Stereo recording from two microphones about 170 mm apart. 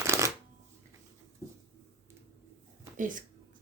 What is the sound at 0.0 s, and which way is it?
Shuffling cards, 15° right (ahead or behind).